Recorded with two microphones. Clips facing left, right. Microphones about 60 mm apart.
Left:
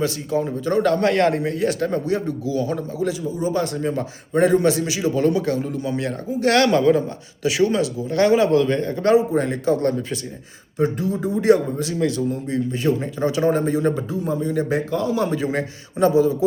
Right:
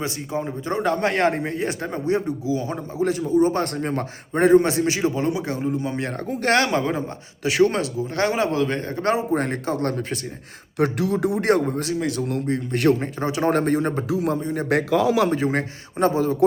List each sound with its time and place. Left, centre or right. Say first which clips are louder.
0.0 s speech: left 5 dB; right
3.1 s speech: right 7 dB; right
5.1 s speech: left 5 dB; right
7.4 s speech: even; right
10.8 s speech: right 1 dB; right
11.4 s speech: left 7 dB; right
12.7 s speech: right 4 dB; right
13.0 s speech: left 3 dB; right
13.5 s speech: even; right
13.7 s speech: left 2 dB; right
14.1 s speech: right 2 dB; right
14.4 s speech: left 4 dB; right
14.7 s speech: right 3 dB; right
15.3 s speech: right 1 dB; right